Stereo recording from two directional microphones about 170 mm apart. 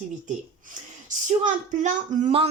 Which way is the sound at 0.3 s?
45° right (ahead or behind).